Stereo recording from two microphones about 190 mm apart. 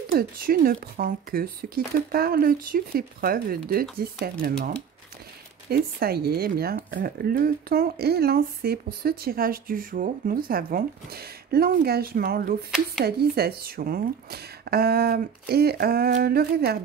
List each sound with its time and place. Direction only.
0.2 s speech: 50° right (ahead or behind)